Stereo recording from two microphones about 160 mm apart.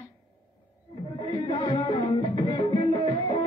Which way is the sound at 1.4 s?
30° left (ahead or behind).